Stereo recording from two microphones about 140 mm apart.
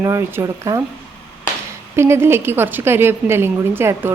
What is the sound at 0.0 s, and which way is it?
Speech, 20° right (ahead or behind).